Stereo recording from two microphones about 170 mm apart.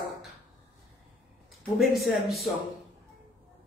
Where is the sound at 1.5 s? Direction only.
Centre (ahead or behind).